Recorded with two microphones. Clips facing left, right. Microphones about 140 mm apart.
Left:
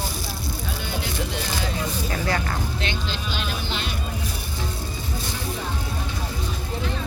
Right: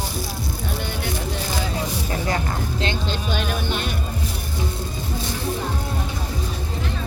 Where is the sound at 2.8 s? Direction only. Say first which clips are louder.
Right 4 dB; 45° right (ahead or behind).